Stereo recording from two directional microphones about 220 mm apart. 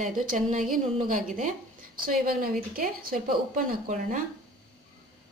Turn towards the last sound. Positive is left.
turn(degrees=-35)  # may be behind; listen again after turning